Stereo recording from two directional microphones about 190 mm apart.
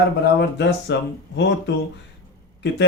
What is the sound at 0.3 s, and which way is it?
Speech, 65° left (ahead or behind).